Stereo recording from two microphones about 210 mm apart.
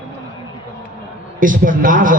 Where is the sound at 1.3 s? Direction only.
40° right (ahead or behind).